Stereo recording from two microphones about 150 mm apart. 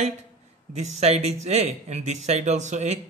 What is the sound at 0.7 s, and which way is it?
Speech, 50° right (ahead or behind).